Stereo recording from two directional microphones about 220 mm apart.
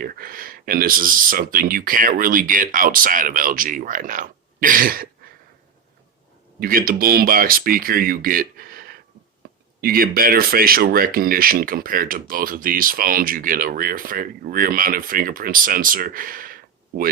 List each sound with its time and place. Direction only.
0.0 s speech: 40° right (ahead or behind)
6.6 s speech: 40° right (ahead or behind)